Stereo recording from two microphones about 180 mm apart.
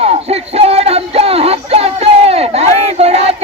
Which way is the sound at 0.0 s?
35° right (ahead or behind).